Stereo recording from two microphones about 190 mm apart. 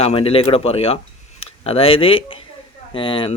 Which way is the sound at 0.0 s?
30° left (ahead or behind).